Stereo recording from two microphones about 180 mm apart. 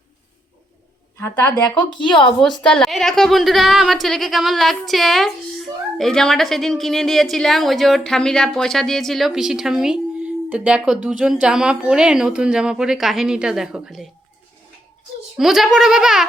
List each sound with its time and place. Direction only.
1.2 s a woman's voice: 20° left (ahead or behind)
2.1 s a woman's voice: 5° left (ahead or behind)
15.4 s a woman's voice: centre (ahead or behind)